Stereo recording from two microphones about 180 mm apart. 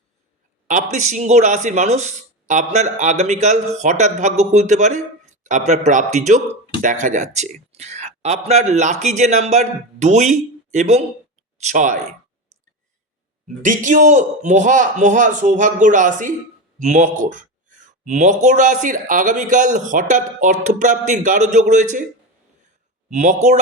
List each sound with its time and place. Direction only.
0.7 s a man's voice: 45° right (ahead or behind)
13.7 s speech: 45° right (ahead or behind)
23.1 s a man's voice: 40° right (ahead or behind)